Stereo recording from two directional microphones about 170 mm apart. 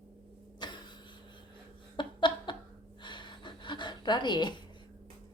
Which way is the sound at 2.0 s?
30° left (ahead or behind).